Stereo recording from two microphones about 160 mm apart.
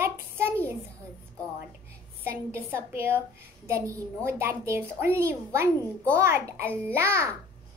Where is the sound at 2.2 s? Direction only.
15° right (ahead or behind).